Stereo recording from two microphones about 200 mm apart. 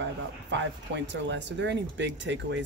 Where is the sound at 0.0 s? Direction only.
60° right (ahead or behind).